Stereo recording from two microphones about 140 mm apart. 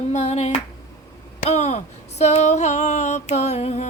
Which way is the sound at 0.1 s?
50° left (ahead or behind).